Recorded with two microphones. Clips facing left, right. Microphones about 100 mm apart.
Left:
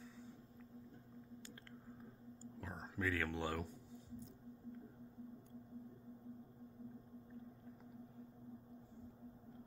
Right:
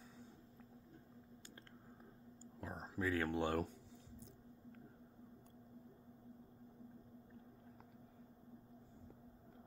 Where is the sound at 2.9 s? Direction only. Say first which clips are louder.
Right 2 dB; 25° right (ahead or behind).